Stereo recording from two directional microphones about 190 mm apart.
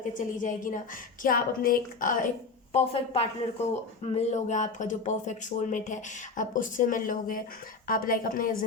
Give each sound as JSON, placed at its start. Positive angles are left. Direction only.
{"t": 0.1, "sound": "a woman's voice", "side_deg": 45}
{"t": 2.7, "sound": "a woman's voice", "side_deg": 30}